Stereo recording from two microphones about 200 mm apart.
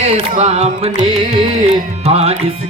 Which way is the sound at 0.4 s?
25° right (ahead or behind).